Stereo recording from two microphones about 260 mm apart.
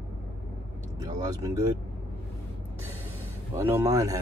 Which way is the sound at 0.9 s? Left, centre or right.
Centre.